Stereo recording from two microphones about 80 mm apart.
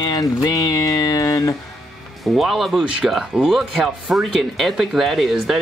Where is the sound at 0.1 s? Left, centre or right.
Left.